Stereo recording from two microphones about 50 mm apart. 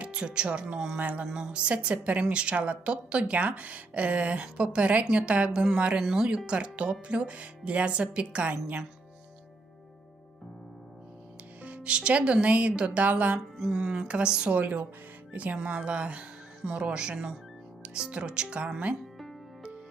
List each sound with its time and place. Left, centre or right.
0.0 s a woman's voice: right
6.0 s a woman's voice: centre; by 8.8 s right
11.6 s a woman's voice: right
13.7 s a woman's voice: centre
14.6 s a woman's voice: right